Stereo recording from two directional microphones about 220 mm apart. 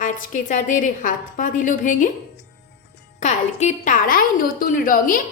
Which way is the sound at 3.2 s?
35° left (ahead or behind).